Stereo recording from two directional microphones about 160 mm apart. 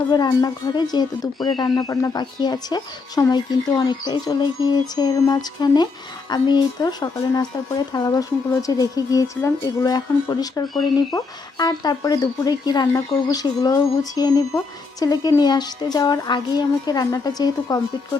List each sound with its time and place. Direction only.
0.1 s speech: 25° left (ahead or behind)